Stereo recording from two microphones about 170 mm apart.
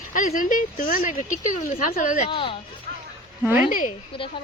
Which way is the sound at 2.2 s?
30° left (ahead or behind).